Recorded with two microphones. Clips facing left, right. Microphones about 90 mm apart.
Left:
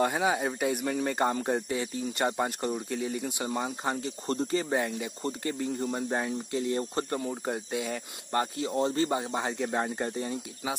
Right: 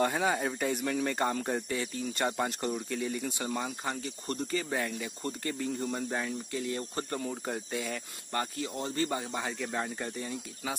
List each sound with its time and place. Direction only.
0.0 s speech: 5° left (ahead or behind)
6.0 s speech: 30° left (ahead or behind)
6.8 s speech: 20° left (ahead or behind)
8.3 s speech: 25° left (ahead or behind)